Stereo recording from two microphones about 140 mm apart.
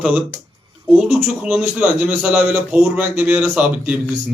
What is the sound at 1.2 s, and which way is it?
A man's voice, 10° right (ahead or behind).